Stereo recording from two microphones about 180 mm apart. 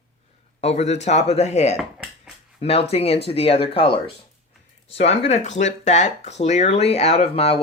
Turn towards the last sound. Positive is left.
turn(degrees=35)  # may be behind; listen again after turning